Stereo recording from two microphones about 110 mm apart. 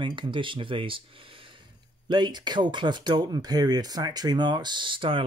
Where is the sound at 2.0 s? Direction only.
40° right (ahead or behind).